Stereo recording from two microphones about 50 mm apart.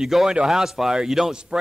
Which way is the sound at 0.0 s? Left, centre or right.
Centre.